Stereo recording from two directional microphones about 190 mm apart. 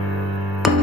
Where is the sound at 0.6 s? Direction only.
Centre (ahead or behind).